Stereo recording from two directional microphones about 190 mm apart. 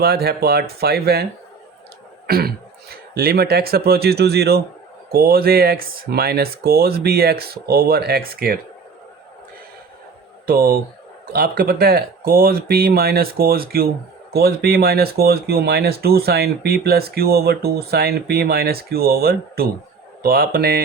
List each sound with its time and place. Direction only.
0.0 s speech: 55° right (ahead or behind)
2.2 s throat clearing: 55° right (ahead or behind)
2.9 s speech: 55° right (ahead or behind)
10.4 s speech: 50° right (ahead or behind)